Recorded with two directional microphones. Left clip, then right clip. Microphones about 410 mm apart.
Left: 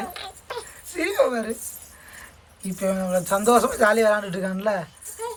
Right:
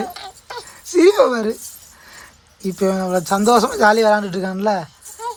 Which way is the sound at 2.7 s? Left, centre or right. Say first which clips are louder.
Right 5 dB; centre.